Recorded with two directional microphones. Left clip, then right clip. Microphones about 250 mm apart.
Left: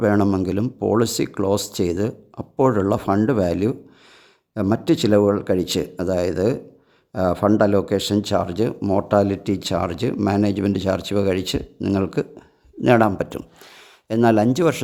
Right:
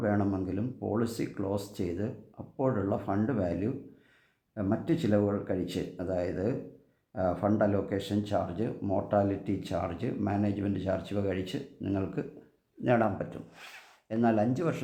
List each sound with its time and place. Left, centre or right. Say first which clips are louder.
0.0 s speech: left 12 dB; left